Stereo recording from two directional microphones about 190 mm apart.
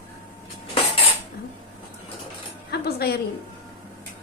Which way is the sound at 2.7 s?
55° left (ahead or behind).